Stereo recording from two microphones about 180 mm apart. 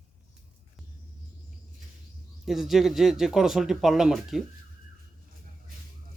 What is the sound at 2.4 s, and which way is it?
Speech, centre (ahead or behind).